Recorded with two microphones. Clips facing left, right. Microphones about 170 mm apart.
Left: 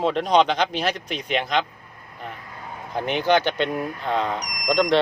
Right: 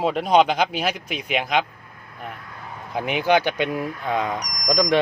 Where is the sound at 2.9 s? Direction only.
10° right (ahead or behind).